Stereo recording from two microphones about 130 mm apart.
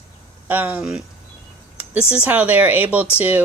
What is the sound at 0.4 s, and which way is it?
Speech, 15° right (ahead or behind).